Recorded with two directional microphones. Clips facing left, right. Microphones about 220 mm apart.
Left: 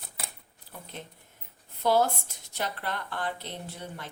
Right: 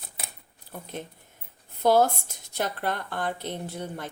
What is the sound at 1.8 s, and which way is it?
A woman's voice, 45° right (ahead or behind).